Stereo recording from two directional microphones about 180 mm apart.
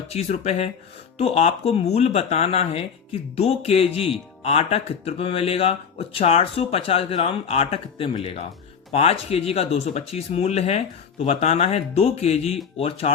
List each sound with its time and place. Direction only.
0.1 s speech: 35° left (ahead or behind)